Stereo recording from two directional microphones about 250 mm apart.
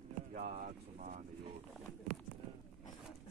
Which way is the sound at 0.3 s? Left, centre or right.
Right.